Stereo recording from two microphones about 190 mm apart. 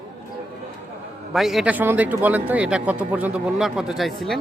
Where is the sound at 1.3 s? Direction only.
Centre (ahead or behind).